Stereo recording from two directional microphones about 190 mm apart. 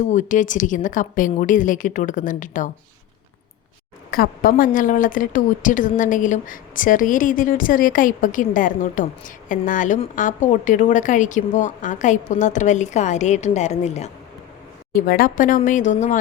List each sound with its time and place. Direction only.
0.0 s a woman's voice: 40° left (ahead or behind)
4.1 s a woman's voice: 50° left (ahead or behind)
14.9 s a woman's voice: 50° left (ahead or behind)